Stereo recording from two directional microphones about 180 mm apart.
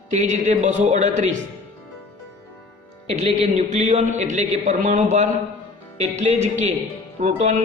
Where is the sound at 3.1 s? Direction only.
35° right (ahead or behind).